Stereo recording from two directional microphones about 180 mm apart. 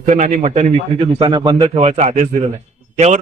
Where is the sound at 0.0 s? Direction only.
40° right (ahead or behind).